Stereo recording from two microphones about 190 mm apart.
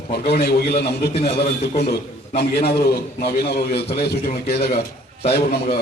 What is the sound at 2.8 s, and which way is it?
A man's voice, 55° left (ahead or behind).